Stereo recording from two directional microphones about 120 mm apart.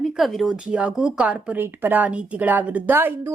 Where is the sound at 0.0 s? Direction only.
Centre (ahead or behind).